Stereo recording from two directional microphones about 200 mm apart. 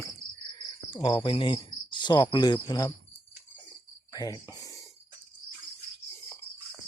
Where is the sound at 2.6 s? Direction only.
20° left (ahead or behind).